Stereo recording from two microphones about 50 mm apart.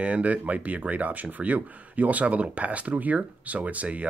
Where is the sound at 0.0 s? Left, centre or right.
Right.